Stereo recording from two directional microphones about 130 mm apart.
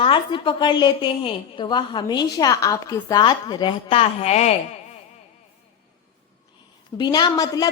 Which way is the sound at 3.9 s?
50° left (ahead or behind).